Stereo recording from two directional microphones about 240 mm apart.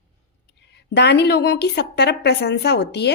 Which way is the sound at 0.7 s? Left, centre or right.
Left.